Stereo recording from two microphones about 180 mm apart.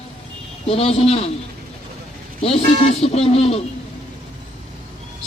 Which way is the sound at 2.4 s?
30° left (ahead or behind).